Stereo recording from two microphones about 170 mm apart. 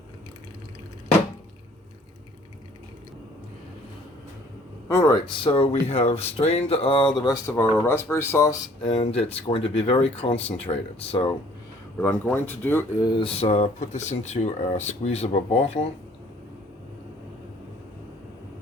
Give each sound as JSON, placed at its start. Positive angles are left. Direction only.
{"t": 4.9, "sound": "speech", "side_deg": 20}
{"t": 8.8, "sound": "speech", "side_deg": 30}
{"t": 11.9, "sound": "speech", "side_deg": 10}
{"t": 13.1, "sound": "speech", "side_deg": 30}